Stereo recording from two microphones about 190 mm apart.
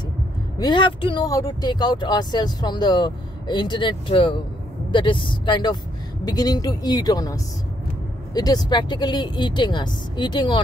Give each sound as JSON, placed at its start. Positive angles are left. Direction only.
{"t": 0.6, "sound": "speech", "side_deg": 25}